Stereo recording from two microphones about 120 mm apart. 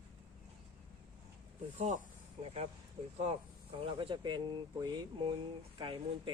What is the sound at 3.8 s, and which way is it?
Speech, 50° right (ahead or behind).